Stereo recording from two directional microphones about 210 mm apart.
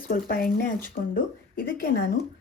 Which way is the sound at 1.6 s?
45° left (ahead or behind).